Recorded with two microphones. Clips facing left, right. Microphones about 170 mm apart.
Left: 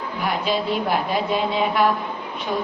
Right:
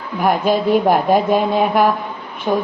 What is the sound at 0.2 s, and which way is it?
Mantra, 50° right (ahead or behind).